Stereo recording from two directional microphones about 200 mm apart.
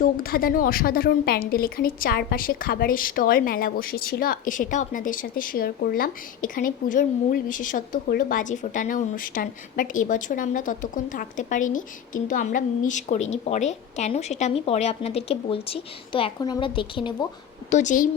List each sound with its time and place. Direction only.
0.0 s a woman's voice: 45° left (ahead or behind); by 17.2 s 25° left (ahead or behind)
17.7 s a woman's voice: 35° left (ahead or behind)